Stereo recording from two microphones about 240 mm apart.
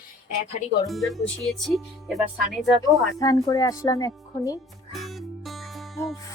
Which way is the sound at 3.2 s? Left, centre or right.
Centre.